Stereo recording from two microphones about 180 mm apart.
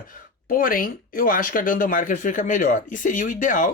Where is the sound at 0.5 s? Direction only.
50° left (ahead or behind).